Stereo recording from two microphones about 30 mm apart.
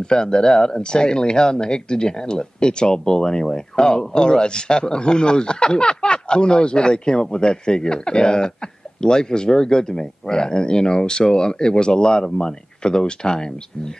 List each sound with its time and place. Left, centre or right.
0.0 s a man's voice: left